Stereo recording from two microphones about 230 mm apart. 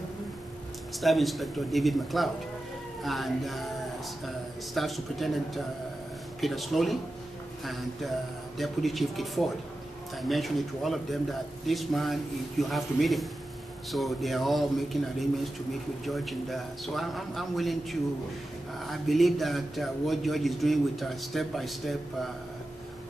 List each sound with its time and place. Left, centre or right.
1.0 s speech: centre
4.7 s speech: centre
8.5 s speech: centre
18.8 s speech: centre